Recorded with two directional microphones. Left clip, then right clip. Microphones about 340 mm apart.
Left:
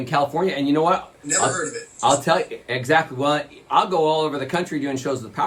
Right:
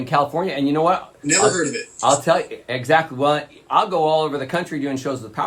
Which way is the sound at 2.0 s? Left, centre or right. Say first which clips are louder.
Right 1 dB; centre.